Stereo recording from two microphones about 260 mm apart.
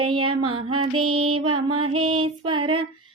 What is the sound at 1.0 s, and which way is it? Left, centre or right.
Music, right.